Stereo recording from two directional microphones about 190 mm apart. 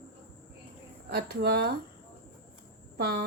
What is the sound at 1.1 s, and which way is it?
Speech, 55° right (ahead or behind).